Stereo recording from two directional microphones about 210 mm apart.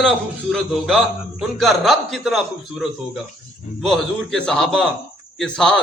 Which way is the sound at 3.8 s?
Centre (ahead or behind).